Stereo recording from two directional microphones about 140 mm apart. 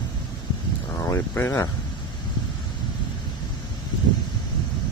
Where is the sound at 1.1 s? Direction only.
20° left (ahead or behind).